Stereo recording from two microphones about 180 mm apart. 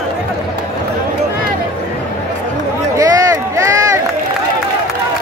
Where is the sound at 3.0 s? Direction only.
15° right (ahead or behind).